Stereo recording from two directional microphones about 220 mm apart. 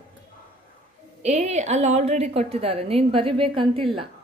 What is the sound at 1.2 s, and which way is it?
A woman's voice, 30° right (ahead or behind).